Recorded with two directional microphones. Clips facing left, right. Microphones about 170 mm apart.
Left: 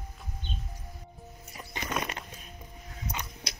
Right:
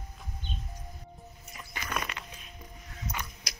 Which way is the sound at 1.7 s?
20° left (ahead or behind).